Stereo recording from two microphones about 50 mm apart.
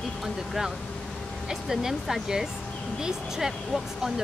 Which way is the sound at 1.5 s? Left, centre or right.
Centre.